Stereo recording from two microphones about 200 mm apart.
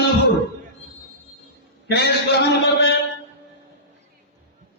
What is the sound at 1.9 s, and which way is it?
Speech, 60° left (ahead or behind).